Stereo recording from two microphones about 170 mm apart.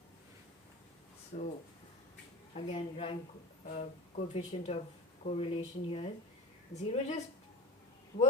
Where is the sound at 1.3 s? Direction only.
45° left (ahead or behind).